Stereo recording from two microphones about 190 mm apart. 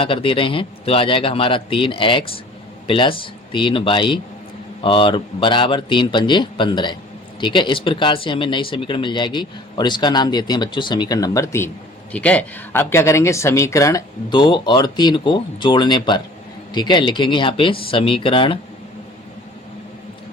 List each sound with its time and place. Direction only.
0.0 s speech: 30° left (ahead or behind)